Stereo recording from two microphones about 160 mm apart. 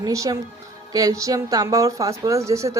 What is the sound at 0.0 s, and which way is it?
A woman's voice, 20° right (ahead or behind).